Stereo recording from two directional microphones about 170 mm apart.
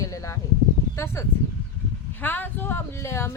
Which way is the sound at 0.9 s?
15° left (ahead or behind).